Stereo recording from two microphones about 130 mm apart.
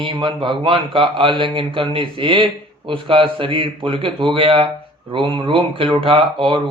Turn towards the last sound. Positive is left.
turn(degrees=-40)  # may be behind; listen again after turning